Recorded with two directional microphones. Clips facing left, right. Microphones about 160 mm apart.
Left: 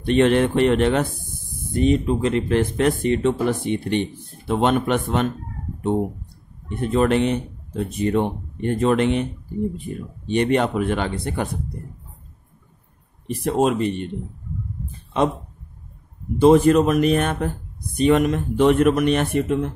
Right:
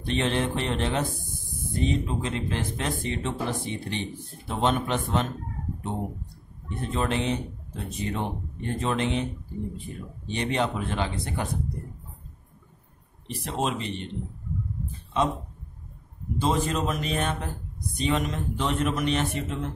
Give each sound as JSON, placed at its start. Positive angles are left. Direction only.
{"t": 0.0, "sound": "speech", "side_deg": 60}
{"t": 6.8, "sound": "speech", "side_deg": 60}
{"t": 13.3, "sound": "speech", "side_deg": 50}
{"t": 16.3, "sound": "speech", "side_deg": 60}